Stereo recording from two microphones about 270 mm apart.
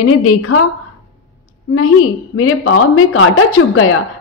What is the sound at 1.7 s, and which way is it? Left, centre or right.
Speech, left.